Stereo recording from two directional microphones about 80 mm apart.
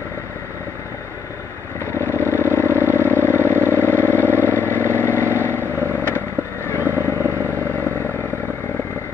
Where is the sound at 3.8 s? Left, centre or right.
Left.